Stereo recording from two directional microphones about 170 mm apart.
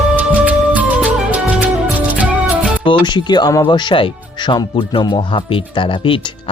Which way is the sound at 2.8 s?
30° left (ahead or behind).